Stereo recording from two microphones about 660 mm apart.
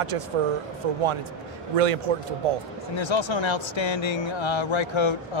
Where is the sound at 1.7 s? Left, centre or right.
Right.